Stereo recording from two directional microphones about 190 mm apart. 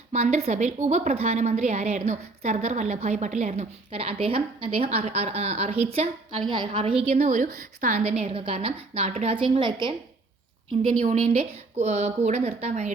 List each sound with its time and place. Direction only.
0.1 s a woman's voice: 35° right (ahead or behind)
11.0 s a woman's voice: 40° right (ahead or behind)